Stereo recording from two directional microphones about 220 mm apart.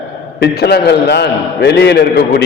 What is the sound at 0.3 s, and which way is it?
A man's voice, 50° left (ahead or behind).